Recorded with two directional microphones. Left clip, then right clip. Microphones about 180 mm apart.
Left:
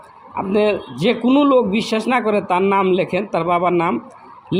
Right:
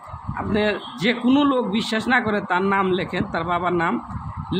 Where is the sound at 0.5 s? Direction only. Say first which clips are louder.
Left 5 dB; 15° left (ahead or behind).